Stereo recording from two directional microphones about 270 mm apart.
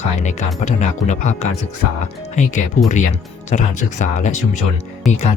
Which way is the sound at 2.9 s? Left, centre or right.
Left.